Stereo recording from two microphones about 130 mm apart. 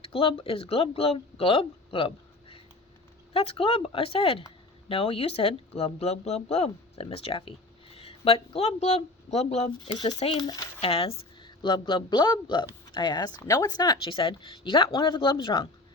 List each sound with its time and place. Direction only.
0.0 s speech: 45° left (ahead or behind)
9.9 s speech: 30° left (ahead or behind)
10.8 s speech: 45° left (ahead or behind)
11.4 s speech: 35° left (ahead or behind)